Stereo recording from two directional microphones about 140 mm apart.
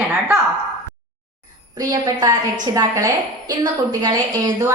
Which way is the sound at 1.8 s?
25° right (ahead or behind).